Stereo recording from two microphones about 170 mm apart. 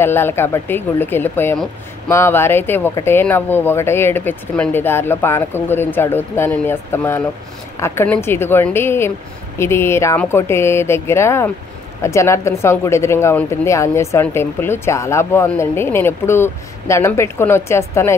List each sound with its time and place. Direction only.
0.0 s speech: 15° left (ahead or behind)